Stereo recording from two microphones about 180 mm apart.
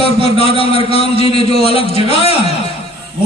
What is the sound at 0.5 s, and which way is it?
A man's voice, 35° left (ahead or behind).